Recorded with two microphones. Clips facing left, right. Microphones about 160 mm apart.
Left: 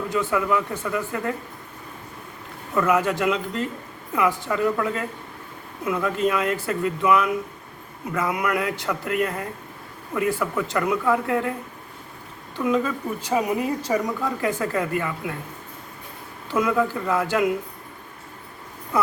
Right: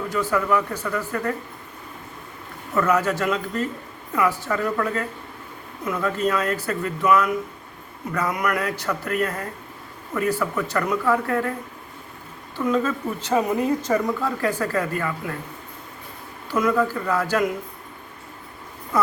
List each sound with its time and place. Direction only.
0.1 s speech: 20° left (ahead or behind)
2.7 s speech: 20° left (ahead or behind)
12.5 s speech: 15° left (ahead or behind)
14.6 s speech: 20° left (ahead or behind)
16.5 s speech: 20° left (ahead or behind)